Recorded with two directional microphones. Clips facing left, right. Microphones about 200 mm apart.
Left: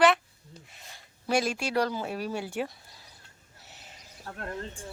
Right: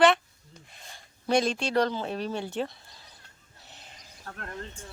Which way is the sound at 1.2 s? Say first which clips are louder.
Right 2 dB; 5° left (ahead or behind).